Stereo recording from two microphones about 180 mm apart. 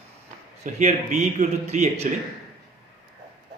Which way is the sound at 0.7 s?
40° right (ahead or behind).